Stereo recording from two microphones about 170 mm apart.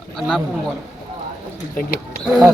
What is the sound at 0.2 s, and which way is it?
Speech, centre (ahead or behind).